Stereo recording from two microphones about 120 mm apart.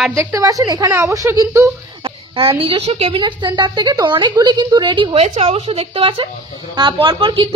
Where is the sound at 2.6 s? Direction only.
50° right (ahead or behind).